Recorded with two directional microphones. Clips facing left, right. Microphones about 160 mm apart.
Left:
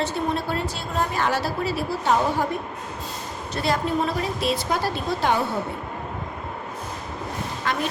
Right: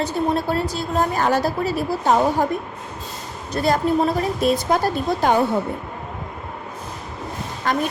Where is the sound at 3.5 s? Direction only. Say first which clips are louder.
Right 5 dB; 40° right (ahead or behind).